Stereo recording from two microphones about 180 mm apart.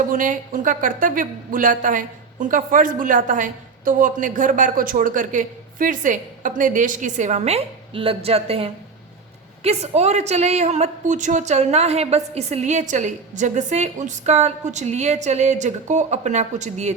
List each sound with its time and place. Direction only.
0.1 s a woman's voice: 45° right (ahead or behind)